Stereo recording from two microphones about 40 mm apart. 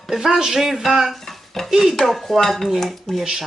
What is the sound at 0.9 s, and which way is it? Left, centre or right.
Dishes, centre.